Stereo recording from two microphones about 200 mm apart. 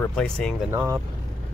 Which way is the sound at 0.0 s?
5° left (ahead or behind).